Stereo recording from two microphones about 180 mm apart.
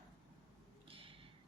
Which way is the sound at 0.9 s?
30° right (ahead or behind).